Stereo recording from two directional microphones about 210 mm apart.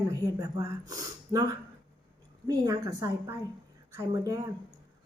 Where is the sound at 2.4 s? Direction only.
15° right (ahead or behind).